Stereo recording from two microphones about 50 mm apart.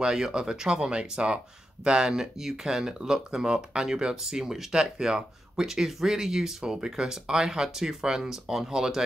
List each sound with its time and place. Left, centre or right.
0.0 s speech: centre